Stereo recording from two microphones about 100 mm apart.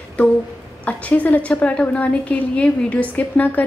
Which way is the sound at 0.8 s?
15° left (ahead or behind).